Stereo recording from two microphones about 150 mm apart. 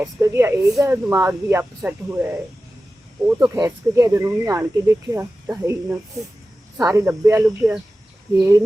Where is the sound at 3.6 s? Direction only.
20° right (ahead or behind).